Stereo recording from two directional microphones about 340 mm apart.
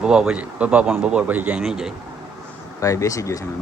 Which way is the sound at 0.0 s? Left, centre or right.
Centre.